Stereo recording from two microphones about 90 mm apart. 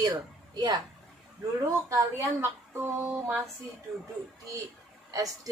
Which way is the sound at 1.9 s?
30° right (ahead or behind).